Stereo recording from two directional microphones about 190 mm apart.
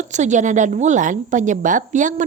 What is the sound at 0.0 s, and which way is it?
A woman's voice, 40° right (ahead or behind).